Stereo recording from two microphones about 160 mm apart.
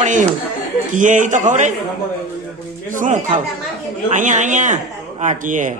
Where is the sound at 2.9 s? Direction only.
50° right (ahead or behind).